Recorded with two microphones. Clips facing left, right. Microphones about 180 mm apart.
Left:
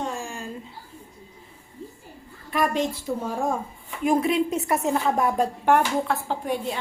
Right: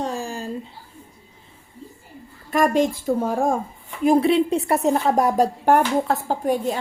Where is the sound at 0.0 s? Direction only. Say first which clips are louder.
Right 4 dB; 35° right (ahead or behind).